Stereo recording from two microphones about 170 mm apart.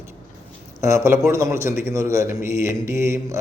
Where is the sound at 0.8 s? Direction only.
15° right (ahead or behind).